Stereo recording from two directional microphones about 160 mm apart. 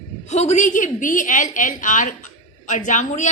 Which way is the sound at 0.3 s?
45° left (ahead or behind).